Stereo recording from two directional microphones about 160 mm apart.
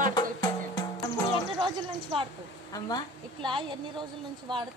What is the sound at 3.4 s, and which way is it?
Speech, 30° right (ahead or behind).